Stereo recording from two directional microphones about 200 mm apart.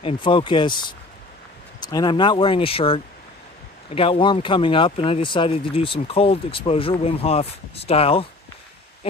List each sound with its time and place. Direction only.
0.0 s speech: 25° left (ahead or behind)